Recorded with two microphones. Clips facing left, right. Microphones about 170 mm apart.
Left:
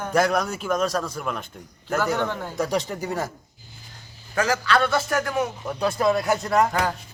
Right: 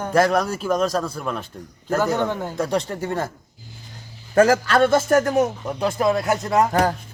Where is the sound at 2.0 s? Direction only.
15° right (ahead or behind).